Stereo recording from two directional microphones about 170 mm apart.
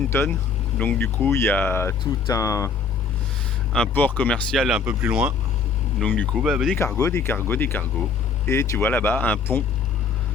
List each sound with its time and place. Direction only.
0.1 s speech: 15° left (ahead or behind)
3.7 s speech: 5° left (ahead or behind)
6.0 s speech: 10° left (ahead or behind)
6.3 s speech: 5° right (ahead or behind)
6.7 s speech: 15° left (ahead or behind)